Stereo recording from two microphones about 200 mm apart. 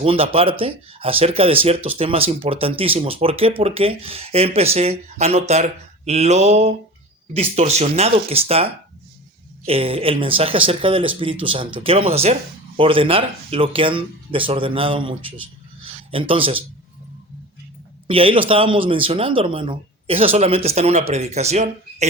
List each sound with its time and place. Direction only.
0.0 s speech: 30° right (ahead or behind)
18.1 s speech: 25° right (ahead or behind)